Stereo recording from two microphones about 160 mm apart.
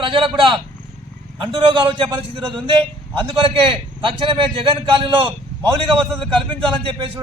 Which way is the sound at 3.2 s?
35° right (ahead or behind).